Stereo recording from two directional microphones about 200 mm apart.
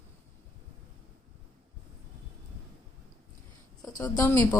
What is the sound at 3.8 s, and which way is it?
Speech, 20° left (ahead or behind).